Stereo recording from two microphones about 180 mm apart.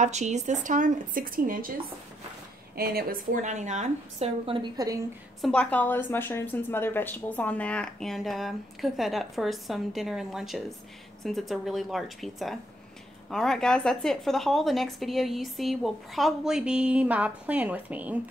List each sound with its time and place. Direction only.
0.0 s speech: 40° right (ahead or behind)
2.7 s speech: 60° right (ahead or behind); by 5.0 s 20° right (ahead or behind)
5.4 s a woman's voice: 5° left (ahead or behind)